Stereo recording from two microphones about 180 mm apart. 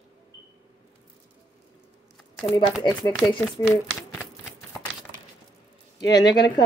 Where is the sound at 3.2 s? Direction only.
15° left (ahead or behind).